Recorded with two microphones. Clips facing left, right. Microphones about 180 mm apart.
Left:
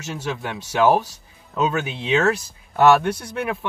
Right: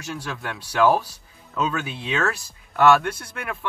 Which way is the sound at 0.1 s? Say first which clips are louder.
Left 4 dB; 20° left (ahead or behind).